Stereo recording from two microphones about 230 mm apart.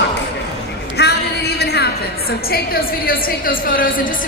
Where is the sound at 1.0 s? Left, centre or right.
Left.